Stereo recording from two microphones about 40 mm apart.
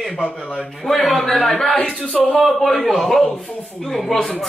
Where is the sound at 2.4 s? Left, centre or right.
Centre.